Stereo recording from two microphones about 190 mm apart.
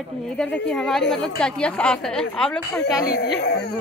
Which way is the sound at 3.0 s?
60° left (ahead or behind).